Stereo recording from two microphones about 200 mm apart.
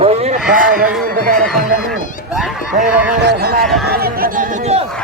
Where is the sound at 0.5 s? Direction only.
45° right (ahead or behind).